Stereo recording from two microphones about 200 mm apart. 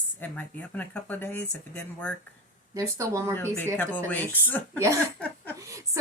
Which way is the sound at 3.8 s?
10° left (ahead or behind).